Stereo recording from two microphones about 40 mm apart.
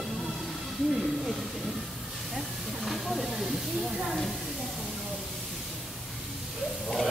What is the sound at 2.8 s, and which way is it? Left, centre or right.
Hiss, centre.